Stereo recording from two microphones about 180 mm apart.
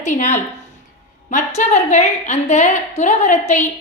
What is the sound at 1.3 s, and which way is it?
A woman's voice, 40° left (ahead or behind).